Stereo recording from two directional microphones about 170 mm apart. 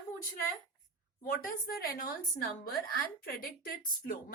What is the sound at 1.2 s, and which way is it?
Speech, 55° left (ahead or behind).